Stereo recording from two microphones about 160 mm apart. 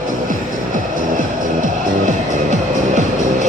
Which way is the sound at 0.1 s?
55° right (ahead or behind).